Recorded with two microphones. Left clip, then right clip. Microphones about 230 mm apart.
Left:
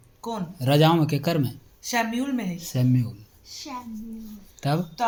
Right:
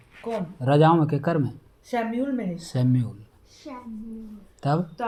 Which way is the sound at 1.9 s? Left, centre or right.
Left.